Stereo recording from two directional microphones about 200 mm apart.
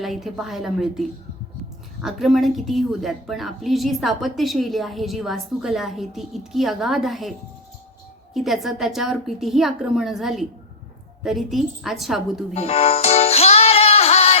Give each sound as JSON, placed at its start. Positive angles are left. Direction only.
{"t": 0.0, "sound": "a woman's voice", "side_deg": 0}
{"t": 12.5, "sound": "music", "side_deg": 30}